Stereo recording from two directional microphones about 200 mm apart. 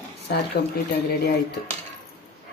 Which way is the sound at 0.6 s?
50° left (ahead or behind).